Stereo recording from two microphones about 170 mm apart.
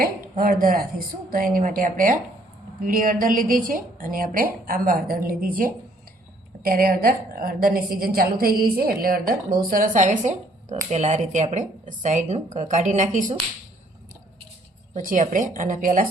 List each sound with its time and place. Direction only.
0.0 s a woman's voice: 55° right (ahead or behind)
14.9 s a woman's voice: 45° right (ahead or behind)